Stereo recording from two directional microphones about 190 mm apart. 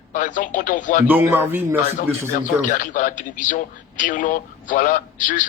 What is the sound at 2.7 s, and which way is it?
Speech, 40° left (ahead or behind).